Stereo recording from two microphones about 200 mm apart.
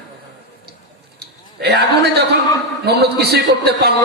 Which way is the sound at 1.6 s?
55° right (ahead or behind).